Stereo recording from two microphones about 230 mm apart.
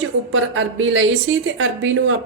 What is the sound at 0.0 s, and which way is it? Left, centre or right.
A woman's voice, right.